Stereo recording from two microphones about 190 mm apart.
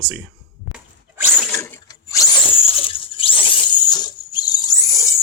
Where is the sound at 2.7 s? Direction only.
30° left (ahead or behind).